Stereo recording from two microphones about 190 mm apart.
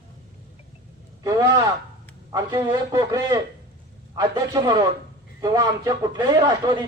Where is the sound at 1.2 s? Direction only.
20° right (ahead or behind).